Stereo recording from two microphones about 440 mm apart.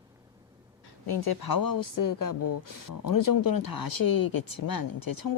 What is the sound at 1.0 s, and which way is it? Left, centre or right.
Speech, left.